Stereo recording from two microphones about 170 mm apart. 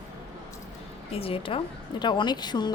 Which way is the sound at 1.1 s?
35° left (ahead or behind).